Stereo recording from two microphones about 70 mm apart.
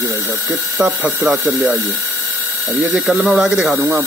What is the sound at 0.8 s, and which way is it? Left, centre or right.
Speech, centre.